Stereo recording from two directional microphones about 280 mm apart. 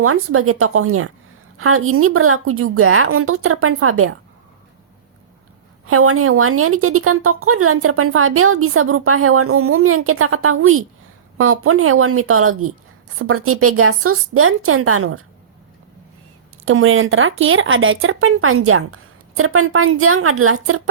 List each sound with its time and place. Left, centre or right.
0.0 s a woman's voice: right
5.8 s a woman's voice: right
16.6 s a woman's voice: right